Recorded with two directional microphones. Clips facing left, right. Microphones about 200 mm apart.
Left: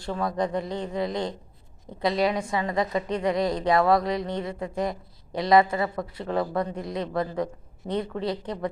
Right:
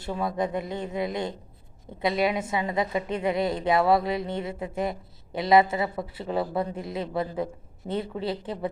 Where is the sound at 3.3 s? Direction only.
25° right (ahead or behind).